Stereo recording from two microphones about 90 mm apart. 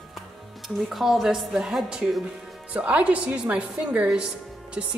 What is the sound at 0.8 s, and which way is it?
A woman's voice, centre (ahead or behind).